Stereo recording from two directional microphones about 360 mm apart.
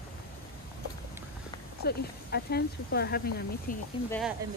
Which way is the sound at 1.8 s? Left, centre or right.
Left.